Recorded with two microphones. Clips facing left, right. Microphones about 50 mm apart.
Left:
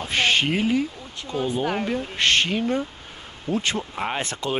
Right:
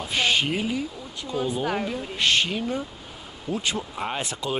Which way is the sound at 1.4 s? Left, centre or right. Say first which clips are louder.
Left 2 dB; left.